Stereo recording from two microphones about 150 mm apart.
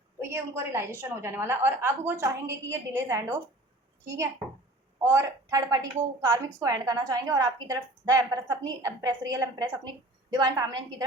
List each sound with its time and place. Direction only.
0.2 s a woman's voice: 15° right (ahead or behind)